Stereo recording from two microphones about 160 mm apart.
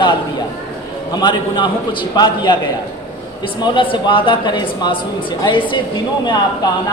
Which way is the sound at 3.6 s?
30° left (ahead or behind).